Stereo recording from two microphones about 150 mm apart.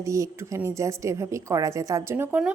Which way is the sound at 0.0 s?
20° right (ahead or behind).